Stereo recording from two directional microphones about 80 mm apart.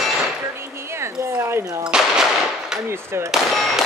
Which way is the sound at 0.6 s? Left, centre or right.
Right.